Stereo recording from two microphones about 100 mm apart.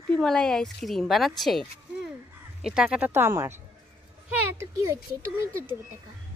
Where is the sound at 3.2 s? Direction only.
25° right (ahead or behind).